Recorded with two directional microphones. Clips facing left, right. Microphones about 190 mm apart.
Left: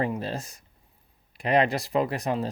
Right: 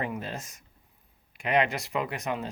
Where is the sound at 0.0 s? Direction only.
35° left (ahead or behind).